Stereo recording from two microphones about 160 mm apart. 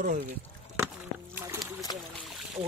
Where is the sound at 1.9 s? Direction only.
25° left (ahead or behind).